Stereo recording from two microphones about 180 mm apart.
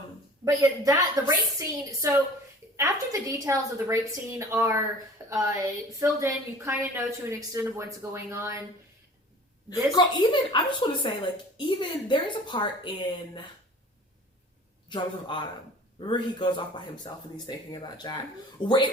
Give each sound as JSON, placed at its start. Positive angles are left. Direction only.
{"t": 0.4, "sound": "a woman's voice", "side_deg": -20}
{"t": 10.0, "sound": "a man's voice", "side_deg": 25}
{"t": 14.8, "sound": "a man's voice", "side_deg": 25}